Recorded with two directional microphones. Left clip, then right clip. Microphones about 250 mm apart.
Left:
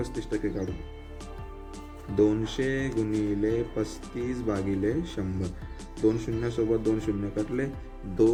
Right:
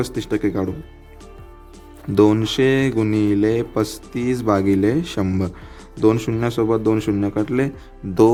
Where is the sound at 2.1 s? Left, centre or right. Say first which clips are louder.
Right 9 dB; right.